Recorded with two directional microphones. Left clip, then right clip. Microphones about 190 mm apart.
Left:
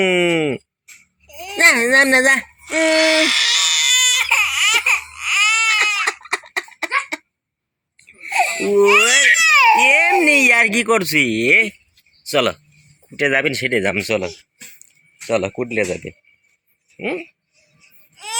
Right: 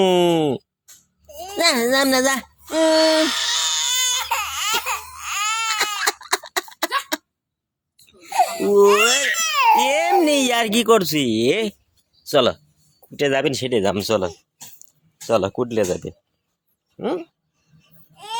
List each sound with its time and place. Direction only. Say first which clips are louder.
0.0 s speech: left 1 dB; 10° right (ahead or behind)
1.3 s a sound: left 6 dB; 5° left (ahead or behind)
5.1 s baby cry: left 8 dB; centre (ahead or behind)
6.1 s a sound: even; 20° right (ahead or behind)
8.0 s speech: left 1 dB; 5° right (ahead or behind)
15.3 s speech: even; 10° right (ahead or behind)